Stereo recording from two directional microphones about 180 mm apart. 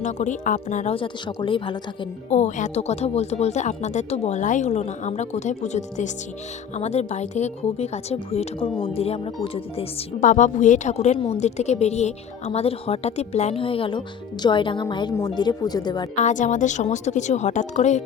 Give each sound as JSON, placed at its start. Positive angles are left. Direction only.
{"t": 0.0, "sound": "speech", "side_deg": 45}
{"t": 2.3, "sound": "a woman's voice", "side_deg": 40}
{"t": 16.1, "sound": "speech", "side_deg": 45}